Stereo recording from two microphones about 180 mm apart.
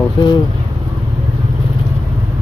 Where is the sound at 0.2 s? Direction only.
25° left (ahead or behind).